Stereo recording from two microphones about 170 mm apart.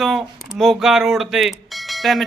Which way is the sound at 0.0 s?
Centre (ahead or behind).